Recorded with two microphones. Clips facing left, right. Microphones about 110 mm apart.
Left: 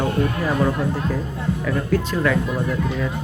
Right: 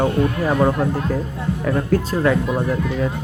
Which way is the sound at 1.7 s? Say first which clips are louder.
Right 4 dB; 40° right (ahead or behind).